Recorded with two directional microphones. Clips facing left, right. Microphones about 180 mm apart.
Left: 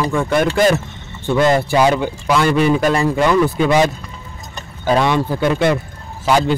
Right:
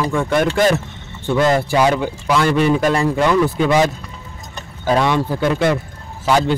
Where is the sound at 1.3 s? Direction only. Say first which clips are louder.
Left 1 dB; 20° left (ahead or behind).